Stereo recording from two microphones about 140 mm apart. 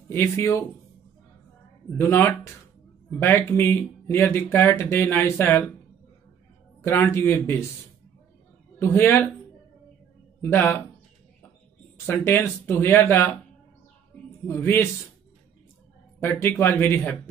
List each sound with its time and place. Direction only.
0.1 s speech: 15° left (ahead or behind)
1.9 s speech: 15° left (ahead or behind)
6.8 s speech: 15° left (ahead or behind)
8.7 s speech: 15° left (ahead or behind)
10.4 s speech: 15° left (ahead or behind)
12.1 s speech: 15° left (ahead or behind)
14.5 s speech: 15° left (ahead or behind)
16.2 s speech: 15° left (ahead or behind)